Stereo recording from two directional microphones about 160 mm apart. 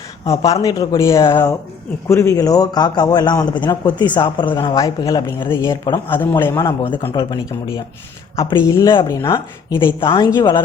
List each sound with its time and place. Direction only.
0.3 s a man's voice: 20° left (ahead or behind)
7.1 s a man's voice: 25° left (ahead or behind)